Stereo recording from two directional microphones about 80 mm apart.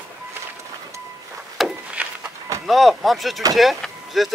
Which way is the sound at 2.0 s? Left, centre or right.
Centre.